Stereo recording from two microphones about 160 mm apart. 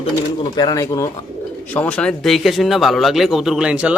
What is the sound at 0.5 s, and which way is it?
Speech, 25° left (ahead or behind).